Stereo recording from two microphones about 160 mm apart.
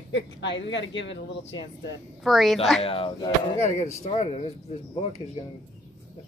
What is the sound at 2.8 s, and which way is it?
Speech, 35° left (ahead or behind).